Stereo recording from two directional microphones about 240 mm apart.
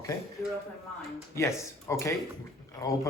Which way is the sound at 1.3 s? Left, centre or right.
Centre.